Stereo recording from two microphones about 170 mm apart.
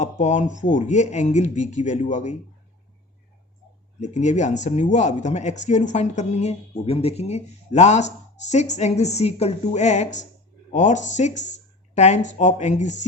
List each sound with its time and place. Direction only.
0.0 s speech: 45° left (ahead or behind)
4.0 s a woman's voice: 45° left (ahead or behind)